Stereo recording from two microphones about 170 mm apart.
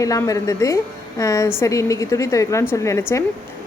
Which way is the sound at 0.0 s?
20° left (ahead or behind).